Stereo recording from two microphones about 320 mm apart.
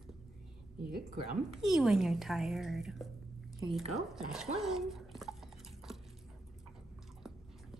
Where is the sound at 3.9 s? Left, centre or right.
Centre.